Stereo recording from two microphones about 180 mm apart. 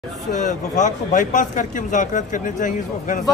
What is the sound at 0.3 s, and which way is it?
Speech, 45° left (ahead or behind).